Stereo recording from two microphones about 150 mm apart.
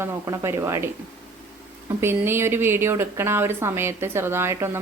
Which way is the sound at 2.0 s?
15° right (ahead or behind).